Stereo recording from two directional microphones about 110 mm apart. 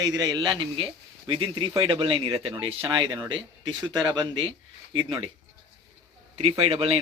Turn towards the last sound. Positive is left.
turn(degrees=-65)  # may be behind; listen again after turning